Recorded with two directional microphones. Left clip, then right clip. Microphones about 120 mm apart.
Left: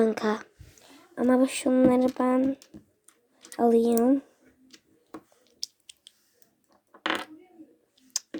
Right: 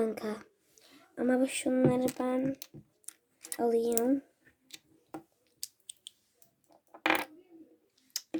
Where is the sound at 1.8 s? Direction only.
35° left (ahead or behind).